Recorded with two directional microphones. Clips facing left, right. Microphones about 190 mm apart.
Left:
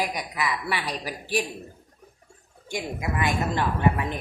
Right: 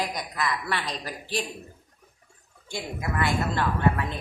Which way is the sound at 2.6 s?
15° left (ahead or behind).